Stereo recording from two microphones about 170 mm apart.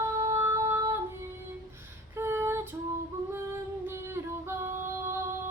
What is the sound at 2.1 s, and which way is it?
Female singing, 15° right (ahead or behind).